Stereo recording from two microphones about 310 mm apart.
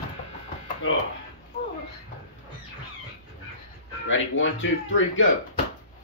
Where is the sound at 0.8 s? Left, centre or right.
Left.